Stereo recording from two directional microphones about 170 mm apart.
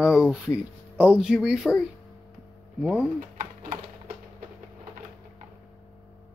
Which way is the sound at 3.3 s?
50° right (ahead or behind).